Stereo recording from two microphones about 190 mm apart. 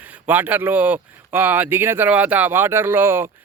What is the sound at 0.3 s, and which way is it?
Speech, 10° right (ahead or behind).